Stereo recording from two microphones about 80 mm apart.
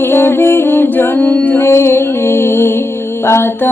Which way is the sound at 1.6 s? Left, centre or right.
Left.